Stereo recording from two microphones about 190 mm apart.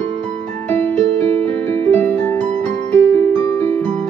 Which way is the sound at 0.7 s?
10° left (ahead or behind).